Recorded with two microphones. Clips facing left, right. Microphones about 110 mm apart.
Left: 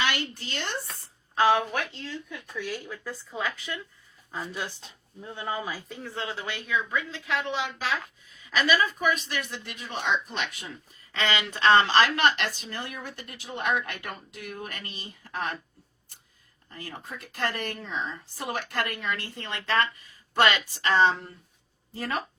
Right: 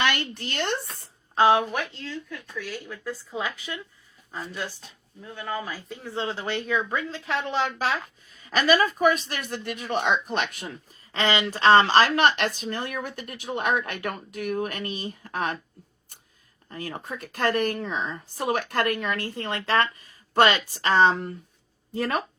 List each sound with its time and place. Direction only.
0.0 s speech: 60° right (ahead or behind)
1.4 s a woman's voice: 15° right (ahead or behind)
1.8 s speech: 10° left (ahead or behind)
3.0 s speech: centre (ahead or behind)
3.3 s a woman's voice: 15° right (ahead or behind)
4.3 s speech: 5° left (ahead or behind)
5.2 s speech: 20° left (ahead or behind)
6.1 s a woman's voice: 30° right (ahead or behind); by 10.7 s 50° right (ahead or behind)
11.1 s speech: 40° right (ahead or behind)
16.6 s speech: 50° right (ahead or behind)
21.9 s speech: 65° right (ahead or behind)